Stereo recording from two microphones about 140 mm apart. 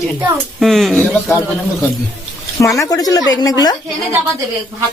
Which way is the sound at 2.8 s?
25° left (ahead or behind).